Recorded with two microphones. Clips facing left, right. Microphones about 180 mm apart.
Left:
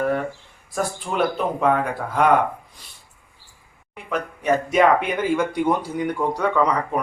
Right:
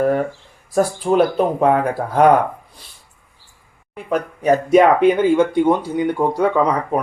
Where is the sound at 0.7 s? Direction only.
40° right (ahead or behind).